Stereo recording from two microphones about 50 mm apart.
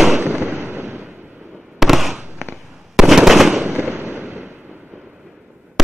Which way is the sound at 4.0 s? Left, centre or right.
Right.